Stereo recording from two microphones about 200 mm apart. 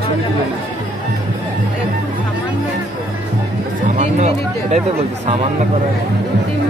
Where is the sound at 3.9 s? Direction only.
35° right (ahead or behind).